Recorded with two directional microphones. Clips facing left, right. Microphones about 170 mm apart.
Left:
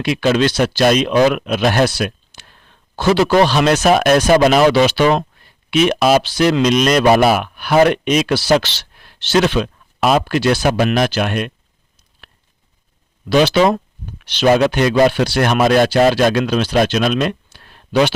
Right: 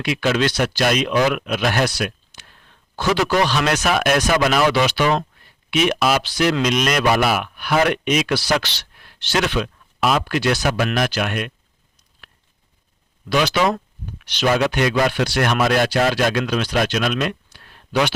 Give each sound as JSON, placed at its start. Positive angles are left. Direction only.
{"t": 0.0, "sound": "speech", "side_deg": 30}
{"t": 13.3, "sound": "speech", "side_deg": 30}